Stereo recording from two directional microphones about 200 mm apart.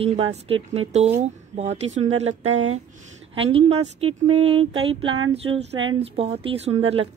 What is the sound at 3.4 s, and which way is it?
Speech, 30° right (ahead or behind).